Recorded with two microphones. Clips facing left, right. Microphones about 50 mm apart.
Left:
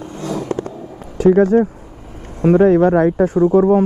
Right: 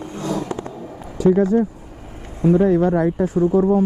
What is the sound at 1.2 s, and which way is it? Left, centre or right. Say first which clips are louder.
Speech: left 4 dB; left.